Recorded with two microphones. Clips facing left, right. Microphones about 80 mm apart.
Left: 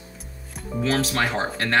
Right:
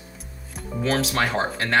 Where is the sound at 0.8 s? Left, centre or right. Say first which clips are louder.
Even; centre.